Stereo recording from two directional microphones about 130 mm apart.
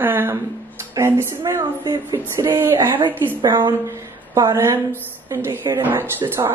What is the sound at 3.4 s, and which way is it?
A woman's voice, 35° right (ahead or behind).